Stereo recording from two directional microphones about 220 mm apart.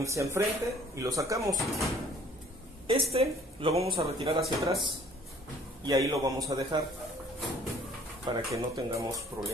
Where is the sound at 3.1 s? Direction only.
25° right (ahead or behind).